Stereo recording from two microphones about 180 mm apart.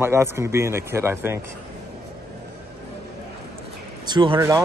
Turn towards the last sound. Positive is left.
turn(degrees=-20)  # may be behind; listen again after turning